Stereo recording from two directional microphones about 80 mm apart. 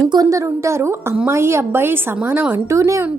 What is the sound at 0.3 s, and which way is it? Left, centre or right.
A woman's voice, right.